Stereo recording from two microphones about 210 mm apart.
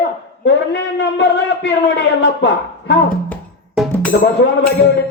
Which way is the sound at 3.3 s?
5° left (ahead or behind).